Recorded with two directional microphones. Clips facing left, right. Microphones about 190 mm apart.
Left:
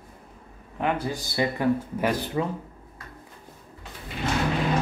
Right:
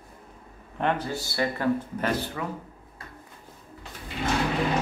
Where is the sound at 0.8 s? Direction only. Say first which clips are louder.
Even; 10° left (ahead or behind).